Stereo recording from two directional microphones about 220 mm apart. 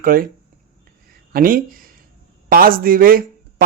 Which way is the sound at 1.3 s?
40° right (ahead or behind).